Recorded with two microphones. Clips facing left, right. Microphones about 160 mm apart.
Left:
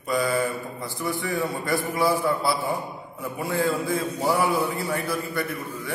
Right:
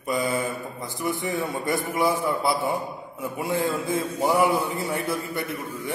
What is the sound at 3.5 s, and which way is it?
A man's voice, 20° right (ahead or behind).